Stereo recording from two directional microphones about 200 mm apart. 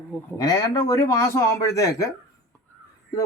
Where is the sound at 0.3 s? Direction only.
15° left (ahead or behind).